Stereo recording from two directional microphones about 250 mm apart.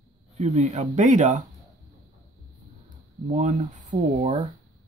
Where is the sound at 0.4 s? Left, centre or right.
Right.